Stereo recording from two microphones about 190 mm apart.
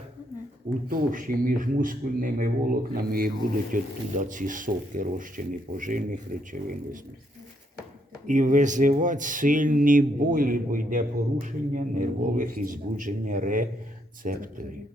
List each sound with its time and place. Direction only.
0.9 s speech: 45° right (ahead or behind)
8.3 s speech: 40° right (ahead or behind)